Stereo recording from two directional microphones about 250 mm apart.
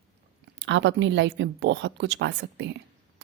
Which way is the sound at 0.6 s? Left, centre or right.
Right.